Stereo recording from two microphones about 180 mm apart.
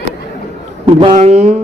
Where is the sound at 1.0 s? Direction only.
35° right (ahead or behind).